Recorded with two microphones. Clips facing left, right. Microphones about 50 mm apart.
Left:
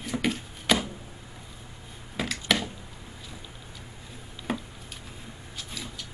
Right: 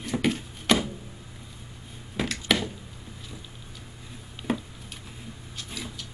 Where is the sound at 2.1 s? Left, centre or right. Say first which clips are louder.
Right 1 dB; centre.